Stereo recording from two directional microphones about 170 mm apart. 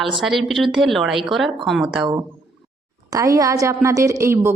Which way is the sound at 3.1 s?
20° right (ahead or behind).